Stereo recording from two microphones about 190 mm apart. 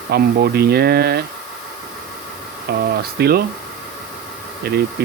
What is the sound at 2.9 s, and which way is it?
Speech, 55° right (ahead or behind).